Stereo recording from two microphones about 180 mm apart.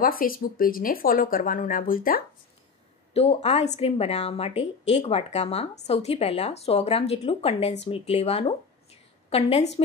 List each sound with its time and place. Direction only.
0.0 s speech: 55° left (ahead or behind)
3.1 s a woman's voice: 35° left (ahead or behind)